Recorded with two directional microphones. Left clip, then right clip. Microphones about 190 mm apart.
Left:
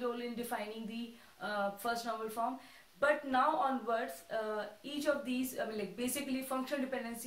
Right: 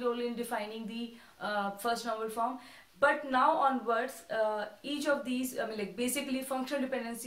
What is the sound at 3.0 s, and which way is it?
A woman's voice, 20° right (ahead or behind).